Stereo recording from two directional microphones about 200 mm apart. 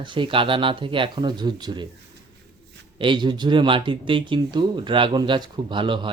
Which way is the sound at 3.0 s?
25° right (ahead or behind).